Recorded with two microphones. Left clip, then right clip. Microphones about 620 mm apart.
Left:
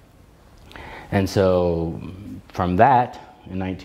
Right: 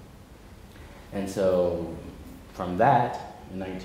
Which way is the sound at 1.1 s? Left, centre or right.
Left.